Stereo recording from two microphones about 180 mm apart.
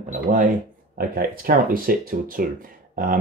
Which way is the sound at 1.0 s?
55° right (ahead or behind).